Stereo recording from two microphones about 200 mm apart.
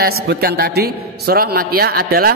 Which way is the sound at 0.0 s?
50° right (ahead or behind).